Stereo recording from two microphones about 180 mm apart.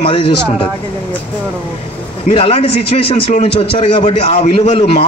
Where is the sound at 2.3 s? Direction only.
30° left (ahead or behind).